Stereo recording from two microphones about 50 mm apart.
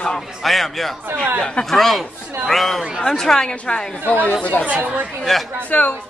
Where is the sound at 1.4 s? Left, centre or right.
Centre.